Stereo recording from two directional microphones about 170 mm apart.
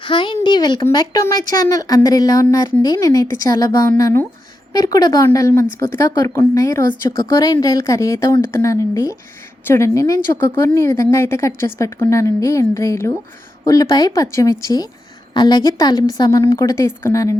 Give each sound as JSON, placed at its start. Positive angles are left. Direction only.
{"t": 0.0, "sound": "a woman's voice", "side_deg": 30}